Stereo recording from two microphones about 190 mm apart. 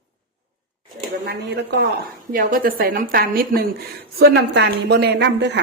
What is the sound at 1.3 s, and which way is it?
Speech, 65° right (ahead or behind).